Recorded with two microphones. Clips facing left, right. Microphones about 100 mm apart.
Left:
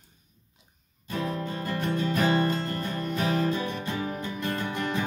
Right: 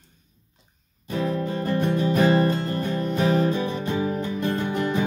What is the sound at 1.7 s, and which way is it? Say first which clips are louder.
Music: right 5 dB; 20° right (ahead or behind).